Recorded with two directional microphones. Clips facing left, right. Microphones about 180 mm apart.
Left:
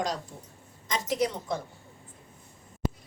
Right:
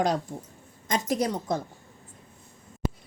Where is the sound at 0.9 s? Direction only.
45° right (ahead or behind).